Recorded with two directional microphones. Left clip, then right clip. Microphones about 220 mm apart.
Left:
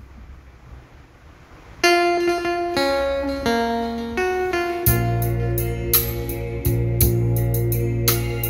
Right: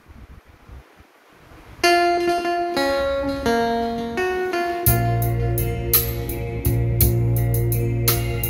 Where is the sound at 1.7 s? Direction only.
5° right (ahead or behind).